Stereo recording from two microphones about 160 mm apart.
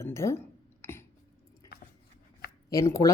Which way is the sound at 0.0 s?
15° left (ahead or behind).